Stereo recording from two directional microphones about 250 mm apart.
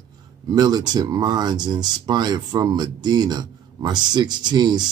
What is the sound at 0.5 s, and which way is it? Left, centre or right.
Speech, centre.